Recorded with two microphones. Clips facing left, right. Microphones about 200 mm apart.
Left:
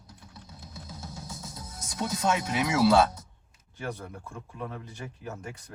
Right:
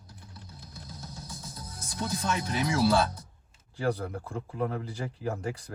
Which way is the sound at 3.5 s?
35° right (ahead or behind).